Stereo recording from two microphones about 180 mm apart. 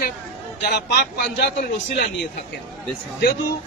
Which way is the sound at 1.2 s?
50° left (ahead or behind).